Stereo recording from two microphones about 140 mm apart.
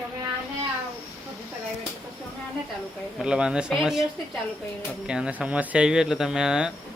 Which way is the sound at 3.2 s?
5° right (ahead or behind).